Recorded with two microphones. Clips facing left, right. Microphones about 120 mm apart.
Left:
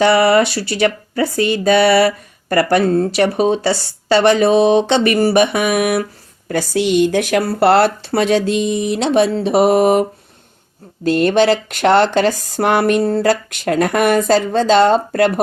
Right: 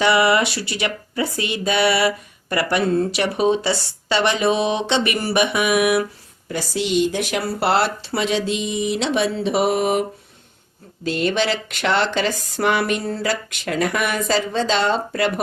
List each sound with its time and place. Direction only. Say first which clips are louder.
0.0 s speech: left 5 dB; 40° left (ahead or behind)
6.5 s speech: left 6 dB; 55° left (ahead or behind)